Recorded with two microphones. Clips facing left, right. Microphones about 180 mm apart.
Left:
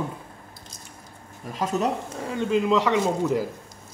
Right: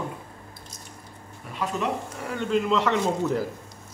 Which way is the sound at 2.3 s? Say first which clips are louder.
Left 2 dB; 15° left (ahead or behind).